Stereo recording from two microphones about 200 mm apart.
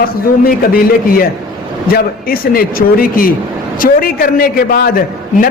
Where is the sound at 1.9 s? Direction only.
45° left (ahead or behind).